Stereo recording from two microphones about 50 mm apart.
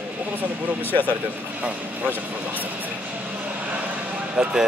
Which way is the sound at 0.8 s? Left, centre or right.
Left.